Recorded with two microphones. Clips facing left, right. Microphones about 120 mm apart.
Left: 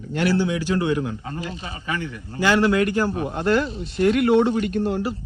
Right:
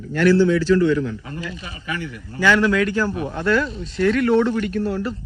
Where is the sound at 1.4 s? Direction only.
30° left (ahead or behind).